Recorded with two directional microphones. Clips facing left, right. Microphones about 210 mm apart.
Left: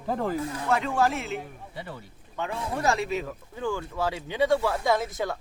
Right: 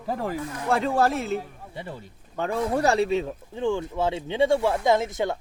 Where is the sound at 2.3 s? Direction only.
40° right (ahead or behind).